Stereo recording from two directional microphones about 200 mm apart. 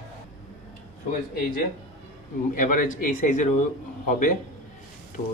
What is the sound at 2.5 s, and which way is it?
A man's voice, 40° left (ahead or behind).